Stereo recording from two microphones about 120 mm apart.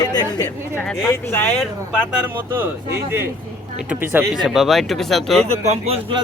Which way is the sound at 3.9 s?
15° right (ahead or behind).